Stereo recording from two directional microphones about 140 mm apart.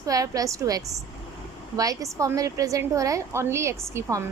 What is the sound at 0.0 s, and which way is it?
A woman's voice, 25° right (ahead or behind).